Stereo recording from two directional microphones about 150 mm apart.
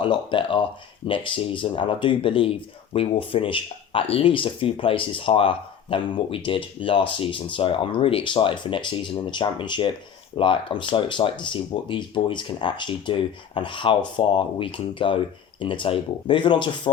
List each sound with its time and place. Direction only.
0.0 s speech: 35° left (ahead or behind)